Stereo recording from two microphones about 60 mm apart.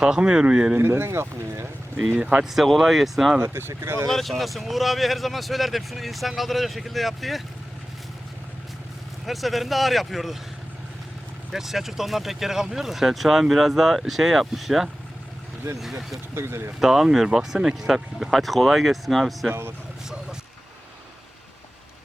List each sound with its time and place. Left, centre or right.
0.0 s speech: centre
0.8 s speech: right
2.1 s speech: right
2.4 s speech: centre
3.4 s speech: right
4.1 s speech: centre
9.2 s speech: centre
11.5 s speech: centre
16.3 s speech: right
16.8 s speech: centre